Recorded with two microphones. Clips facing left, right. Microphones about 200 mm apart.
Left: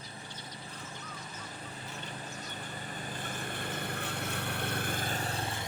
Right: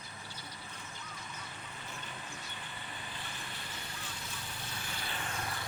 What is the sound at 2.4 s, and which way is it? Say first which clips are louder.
Vehicle: left 5 dB; 45° left (ahead or behind).